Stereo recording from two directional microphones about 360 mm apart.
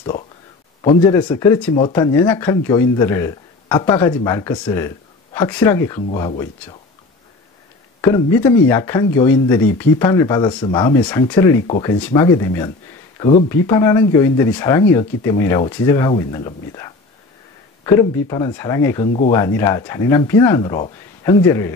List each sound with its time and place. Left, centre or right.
0.8 s speech: centre
8.0 s speech: centre
11.6 s speech: centre